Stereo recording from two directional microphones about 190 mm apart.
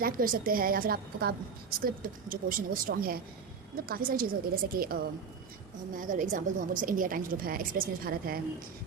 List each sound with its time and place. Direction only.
0.0 s a woman's voice: 50° right (ahead or behind)